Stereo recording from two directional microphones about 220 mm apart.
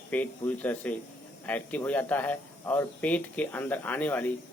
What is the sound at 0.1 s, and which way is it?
Speech, 5° left (ahead or behind).